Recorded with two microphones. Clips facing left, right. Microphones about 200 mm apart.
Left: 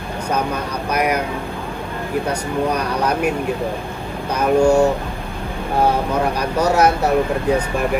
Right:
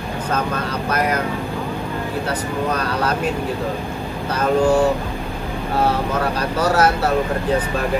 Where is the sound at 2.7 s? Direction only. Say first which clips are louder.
Left 1 dB; 15° left (ahead or behind).